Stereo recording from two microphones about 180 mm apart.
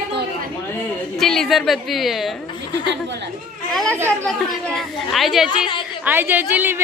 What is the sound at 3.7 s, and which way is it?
Chatter, centre (ahead or behind).